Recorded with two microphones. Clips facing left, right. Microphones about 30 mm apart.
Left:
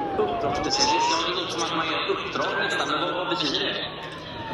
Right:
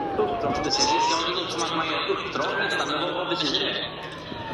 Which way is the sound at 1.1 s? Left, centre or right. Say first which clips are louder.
Even; centre.